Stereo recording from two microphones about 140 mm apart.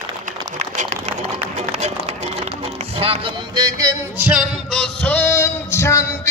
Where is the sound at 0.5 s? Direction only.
60° right (ahead or behind).